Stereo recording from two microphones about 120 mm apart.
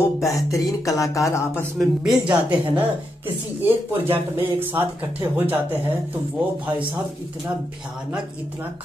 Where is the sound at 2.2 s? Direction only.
10° right (ahead or behind).